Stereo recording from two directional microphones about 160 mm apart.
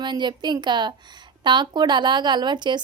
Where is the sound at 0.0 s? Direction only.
30° right (ahead or behind).